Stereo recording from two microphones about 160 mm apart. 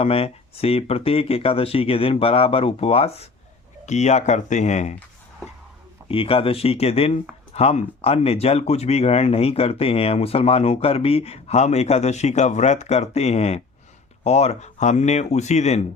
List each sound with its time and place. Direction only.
0.0 s speech: 40° left (ahead or behind)
6.1 s speech: 35° left (ahead or behind)